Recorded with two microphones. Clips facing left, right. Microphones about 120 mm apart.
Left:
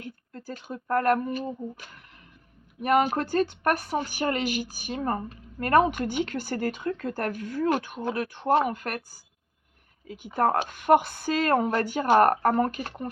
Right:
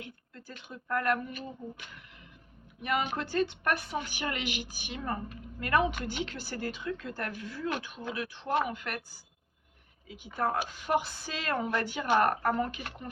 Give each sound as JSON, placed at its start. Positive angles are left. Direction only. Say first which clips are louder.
{"t": 0.0, "sound": "speech", "louder": "left 6 dB", "side_deg": 40}